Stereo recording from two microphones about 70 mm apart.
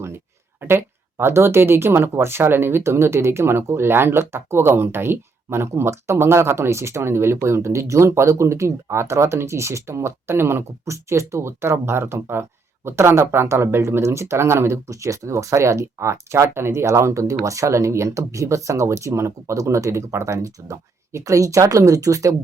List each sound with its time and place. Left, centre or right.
0.6 s speech: right
14.8 s speech: right